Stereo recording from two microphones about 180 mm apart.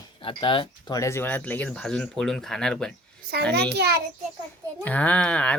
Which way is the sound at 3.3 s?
60° right (ahead or behind).